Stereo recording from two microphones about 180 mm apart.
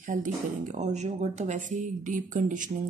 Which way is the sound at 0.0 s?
45° right (ahead or behind).